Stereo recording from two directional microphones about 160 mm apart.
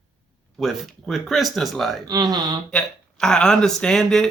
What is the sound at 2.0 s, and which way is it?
Speech, 25° right (ahead or behind).